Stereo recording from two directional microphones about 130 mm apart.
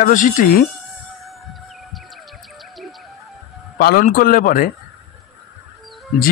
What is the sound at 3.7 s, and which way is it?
Speech, 90° left.